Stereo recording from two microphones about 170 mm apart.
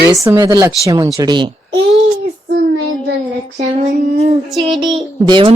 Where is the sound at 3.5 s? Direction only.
45° right (ahead or behind).